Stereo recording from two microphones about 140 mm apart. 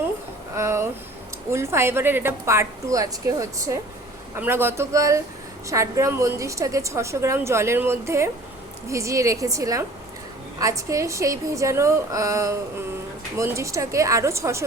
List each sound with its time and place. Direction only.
0.5 s a woman's voice: 20° right (ahead or behind)